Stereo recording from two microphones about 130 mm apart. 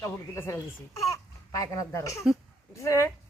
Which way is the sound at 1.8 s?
25° left (ahead or behind).